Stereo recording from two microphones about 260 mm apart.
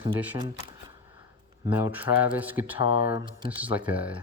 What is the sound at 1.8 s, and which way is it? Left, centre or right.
Speech, centre.